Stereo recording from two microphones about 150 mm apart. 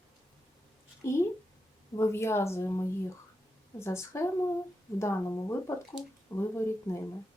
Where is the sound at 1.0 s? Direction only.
20° left (ahead or behind).